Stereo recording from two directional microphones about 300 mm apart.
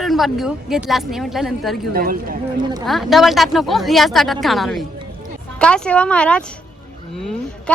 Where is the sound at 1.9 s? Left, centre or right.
Right.